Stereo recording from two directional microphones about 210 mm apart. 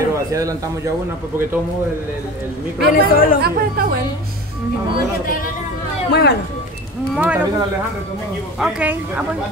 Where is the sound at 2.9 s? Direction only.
40° left (ahead or behind).